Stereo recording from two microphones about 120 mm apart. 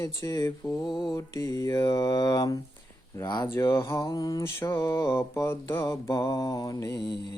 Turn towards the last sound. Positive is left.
turn(degrees=30)  # may be behind; listen again after turning